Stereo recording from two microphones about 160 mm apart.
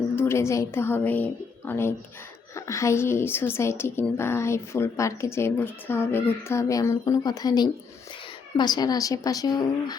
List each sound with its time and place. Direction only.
0.2 s a woman's voice: 15° left (ahead or behind)